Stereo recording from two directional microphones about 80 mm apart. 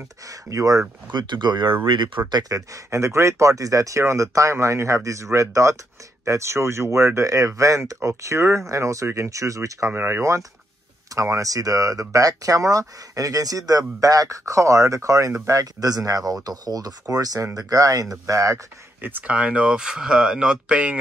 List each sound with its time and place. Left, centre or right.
0.3 s speech: right
1.1 s speech: right
1.9 s speech: right
2.5 s speech: right
18.9 s speech: right